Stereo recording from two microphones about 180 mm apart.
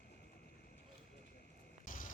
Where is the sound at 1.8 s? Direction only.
45° left (ahead or behind).